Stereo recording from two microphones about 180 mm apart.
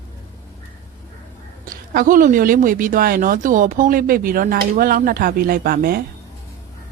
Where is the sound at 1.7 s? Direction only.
50° right (ahead or behind).